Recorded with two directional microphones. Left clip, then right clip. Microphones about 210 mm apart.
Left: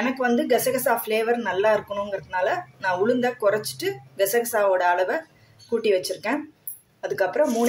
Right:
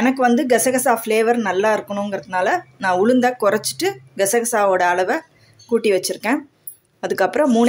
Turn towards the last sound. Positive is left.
turn(degrees=-40)  # may be behind; listen again after turning